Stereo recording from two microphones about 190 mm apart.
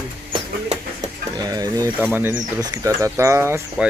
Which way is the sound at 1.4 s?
20° right (ahead or behind).